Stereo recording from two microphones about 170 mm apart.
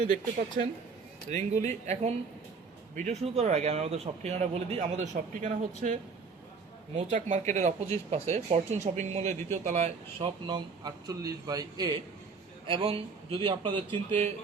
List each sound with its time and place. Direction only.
0.6 s speech: 55° right (ahead or behind)
1.3 s speech: 45° right (ahead or behind)
10.2 s a man's voice: 25° right (ahead or behind)